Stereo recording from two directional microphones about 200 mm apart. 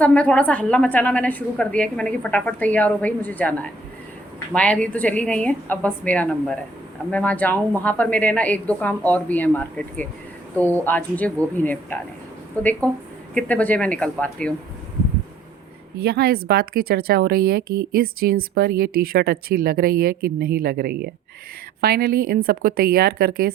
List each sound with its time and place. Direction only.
0.0 s a woman's voice: 5° left (ahead or behind)
16.0 s a woman's voice: 50° right (ahead or behind)